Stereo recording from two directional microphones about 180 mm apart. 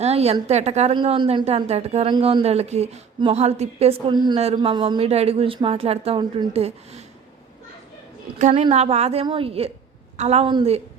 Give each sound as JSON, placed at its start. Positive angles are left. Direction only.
{"t": 0.0, "sound": "a woman's voice", "side_deg": -35}
{"t": 8.4, "sound": "a woman's voice", "side_deg": -40}